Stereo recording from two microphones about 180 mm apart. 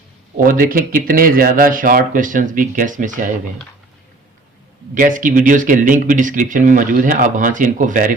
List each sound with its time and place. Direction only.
0.4 s speech: 50° right (ahead or behind)
4.9 s speech: 50° right (ahead or behind)